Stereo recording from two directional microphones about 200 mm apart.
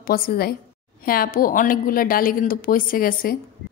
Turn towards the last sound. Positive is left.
turn(degrees=45)  # may be behind; listen again after turning